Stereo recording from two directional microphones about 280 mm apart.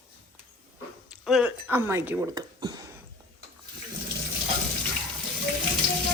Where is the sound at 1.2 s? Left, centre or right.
Centre.